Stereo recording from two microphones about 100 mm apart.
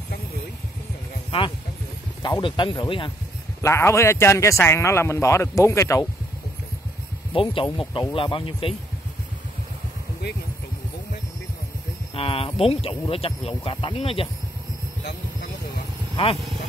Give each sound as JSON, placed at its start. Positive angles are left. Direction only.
{"t": 2.2, "sound": "speech", "side_deg": 50}
{"t": 3.6, "sound": "a man's voice", "side_deg": 30}
{"t": 7.3, "sound": "speech", "side_deg": 60}
{"t": 12.1, "sound": "speech", "side_deg": 65}